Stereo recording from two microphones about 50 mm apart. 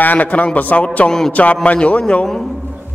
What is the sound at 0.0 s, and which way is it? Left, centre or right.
Speech, left.